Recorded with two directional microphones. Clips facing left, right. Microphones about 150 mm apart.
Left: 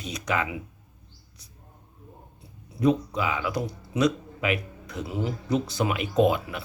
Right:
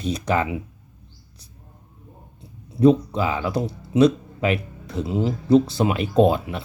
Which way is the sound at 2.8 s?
30° right (ahead or behind).